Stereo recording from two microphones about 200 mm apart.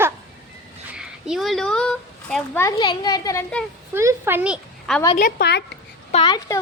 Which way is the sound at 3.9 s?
15° right (ahead or behind).